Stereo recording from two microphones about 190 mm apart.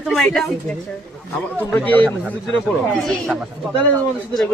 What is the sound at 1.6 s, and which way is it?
Speech, 10° left (ahead or behind).